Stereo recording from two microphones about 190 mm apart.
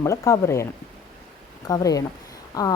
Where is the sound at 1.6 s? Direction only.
20° left (ahead or behind).